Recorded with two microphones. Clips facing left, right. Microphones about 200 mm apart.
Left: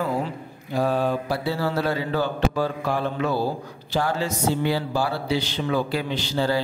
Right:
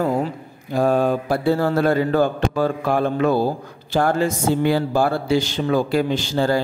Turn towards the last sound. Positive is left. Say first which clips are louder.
# right 4 dB
turn(degrees=-50)  # may be behind; listen again after turning